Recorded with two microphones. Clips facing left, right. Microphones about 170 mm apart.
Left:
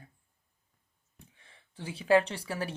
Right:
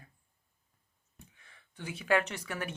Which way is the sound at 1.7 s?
30° left (ahead or behind).